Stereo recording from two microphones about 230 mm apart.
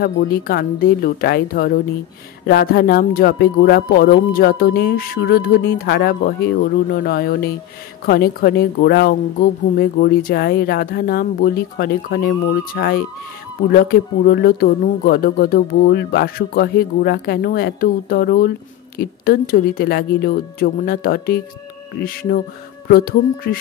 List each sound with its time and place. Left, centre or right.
0.0 s speech: left